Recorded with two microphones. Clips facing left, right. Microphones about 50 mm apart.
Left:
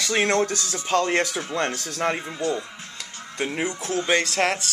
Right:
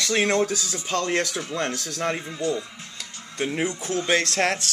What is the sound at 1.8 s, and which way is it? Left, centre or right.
Speech, centre.